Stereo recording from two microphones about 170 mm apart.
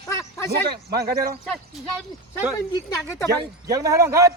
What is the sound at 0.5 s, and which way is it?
Speech, 70° right (ahead or behind).